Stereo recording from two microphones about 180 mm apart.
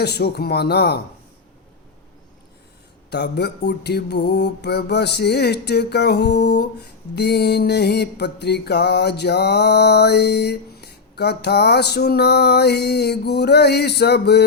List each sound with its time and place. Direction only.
0.0 s mantra: 65° left (ahead or behind)
3.1 s mantra: 65° left (ahead or behind)